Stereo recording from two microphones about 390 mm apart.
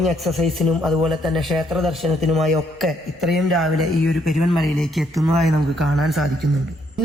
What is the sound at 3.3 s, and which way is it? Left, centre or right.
Speech, centre.